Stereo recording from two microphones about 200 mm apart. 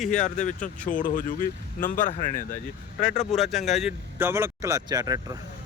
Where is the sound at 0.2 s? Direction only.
40° left (ahead or behind).